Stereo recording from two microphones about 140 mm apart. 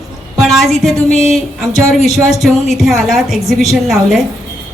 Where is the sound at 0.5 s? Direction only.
Centre (ahead or behind).